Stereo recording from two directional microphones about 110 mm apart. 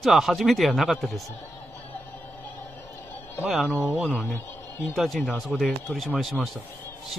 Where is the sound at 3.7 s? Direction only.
25° right (ahead or behind).